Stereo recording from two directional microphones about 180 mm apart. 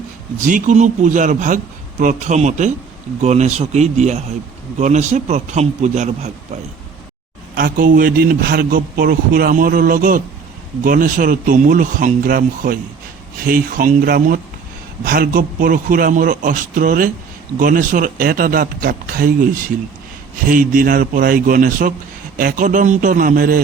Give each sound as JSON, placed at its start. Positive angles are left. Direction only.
{"t": 0.3, "sound": "a man's voice", "side_deg": -45}
{"t": 7.5, "sound": "a man's voice", "side_deg": -50}